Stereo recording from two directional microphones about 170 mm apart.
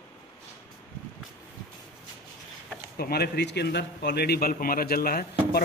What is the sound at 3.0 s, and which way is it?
A man's voice, 70° left (ahead or behind).